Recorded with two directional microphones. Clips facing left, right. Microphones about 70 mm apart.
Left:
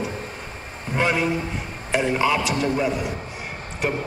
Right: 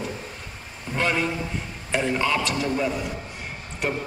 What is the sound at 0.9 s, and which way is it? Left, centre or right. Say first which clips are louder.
A man's voice: left 3 dB; centre.